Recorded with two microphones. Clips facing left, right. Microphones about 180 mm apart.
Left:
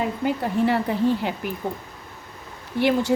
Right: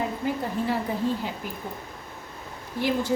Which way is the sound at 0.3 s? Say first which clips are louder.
Left 7 dB; 70° left (ahead or behind).